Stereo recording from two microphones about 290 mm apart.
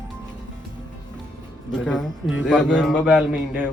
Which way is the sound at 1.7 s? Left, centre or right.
Centre.